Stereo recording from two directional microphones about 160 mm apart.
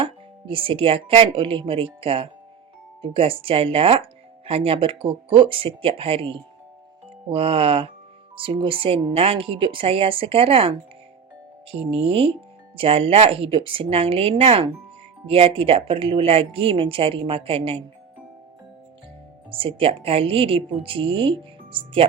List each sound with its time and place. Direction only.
0.0 s speech: 35° right (ahead or behind)
19.5 s speech: 35° right (ahead or behind)